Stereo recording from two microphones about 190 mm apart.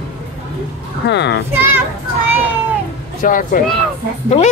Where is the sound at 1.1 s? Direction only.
65° left (ahead or behind).